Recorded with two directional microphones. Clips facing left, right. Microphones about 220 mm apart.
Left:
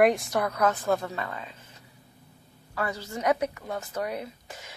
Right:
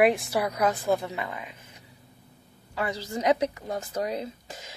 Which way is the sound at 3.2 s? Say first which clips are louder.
Right 2 dB; 20° right (ahead or behind).